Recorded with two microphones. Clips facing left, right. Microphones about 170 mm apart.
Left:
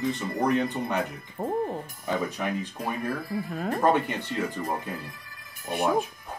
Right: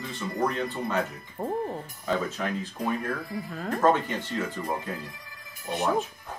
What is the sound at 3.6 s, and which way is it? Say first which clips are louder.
Speech: even; 15° left (ahead or behind).